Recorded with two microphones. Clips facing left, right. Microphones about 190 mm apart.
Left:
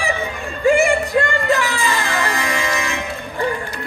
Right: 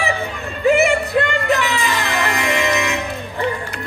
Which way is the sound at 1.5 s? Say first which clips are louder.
Right 1 dB; 20° right (ahead or behind).